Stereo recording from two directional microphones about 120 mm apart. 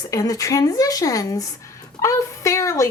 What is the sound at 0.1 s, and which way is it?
A woman's voice, 30° left (ahead or behind).